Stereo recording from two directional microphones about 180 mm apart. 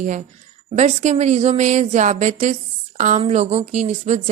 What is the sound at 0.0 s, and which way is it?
A woman's voice, 45° right (ahead or behind).